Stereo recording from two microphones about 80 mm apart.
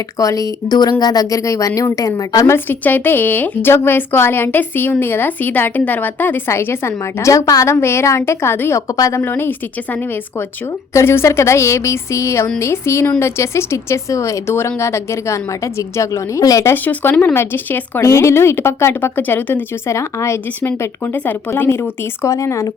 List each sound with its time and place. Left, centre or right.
0.2 s a woman's voice: left
0.7 s a woman's voice: left
2.6 s a woman's voice: left
9.0 s a woman's voice: left
9.2 s a woman's voice: left
10.9 s speech: left
16.7 s a woman's voice: left
18.0 s speech: left
19.9 s speech: left
20.6 s a woman's voice: left
22.2 s speech: left